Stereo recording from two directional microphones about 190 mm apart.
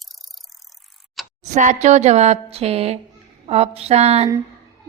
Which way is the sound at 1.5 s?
40° right (ahead or behind).